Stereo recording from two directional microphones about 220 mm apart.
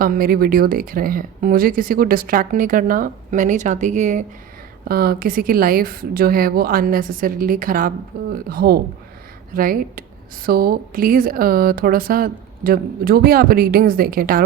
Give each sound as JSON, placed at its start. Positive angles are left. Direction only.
{"t": 0.0, "sound": "speech", "side_deg": -40}